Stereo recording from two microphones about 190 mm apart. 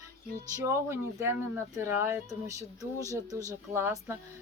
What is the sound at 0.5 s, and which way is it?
Speech, 15° right (ahead or behind).